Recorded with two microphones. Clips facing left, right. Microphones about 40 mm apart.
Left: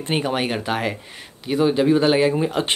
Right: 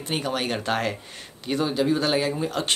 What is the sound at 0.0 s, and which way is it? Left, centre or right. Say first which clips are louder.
Speech: left 5 dB; left.